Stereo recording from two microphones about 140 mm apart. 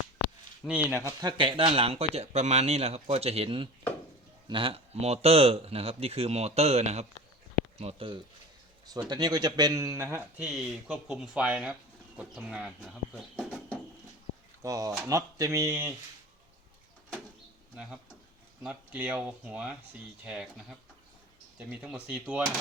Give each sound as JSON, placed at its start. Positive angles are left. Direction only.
{"t": 0.7, "sound": "speech", "side_deg": -10}
{"t": 1.0, "sound": "speech", "side_deg": -30}
{"t": 9.0, "sound": "speech", "side_deg": -30}
{"t": 14.6, "sound": "speech", "side_deg": -25}
{"t": 18.6, "sound": "speech", "side_deg": -10}